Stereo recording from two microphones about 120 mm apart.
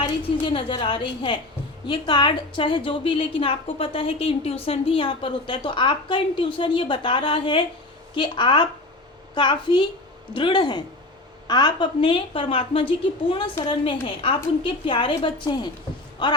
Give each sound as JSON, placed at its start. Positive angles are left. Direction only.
{"t": 0.0, "sound": "a woman's voice", "side_deg": 45}